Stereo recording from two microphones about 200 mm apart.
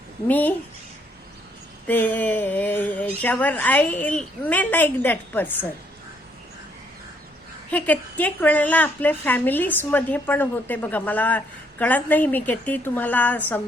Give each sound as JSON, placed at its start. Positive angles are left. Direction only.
{"t": 0.3, "sound": "a woman's voice", "side_deg": 10}
{"t": 1.9, "sound": "a woman's voice", "side_deg": 10}
{"t": 7.7, "sound": "a woman's voice", "side_deg": 10}